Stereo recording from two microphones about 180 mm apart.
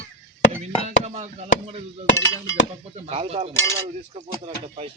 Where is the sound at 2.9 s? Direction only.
35° right (ahead or behind).